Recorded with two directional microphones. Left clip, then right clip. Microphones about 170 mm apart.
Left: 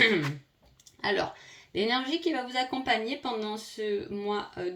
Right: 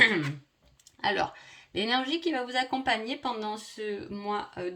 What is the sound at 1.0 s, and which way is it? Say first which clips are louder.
Speech: right 1 dB; 40° right (ahead or behind).